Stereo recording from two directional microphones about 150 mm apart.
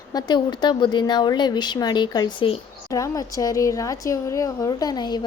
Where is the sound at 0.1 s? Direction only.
30° left (ahead or behind).